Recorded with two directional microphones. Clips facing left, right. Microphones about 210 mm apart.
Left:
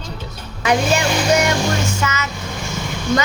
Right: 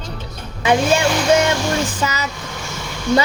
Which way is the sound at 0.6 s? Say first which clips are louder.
Right 2 dB; 25° right (ahead or behind).